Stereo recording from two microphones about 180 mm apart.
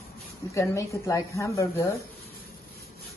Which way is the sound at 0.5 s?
15° left (ahead or behind).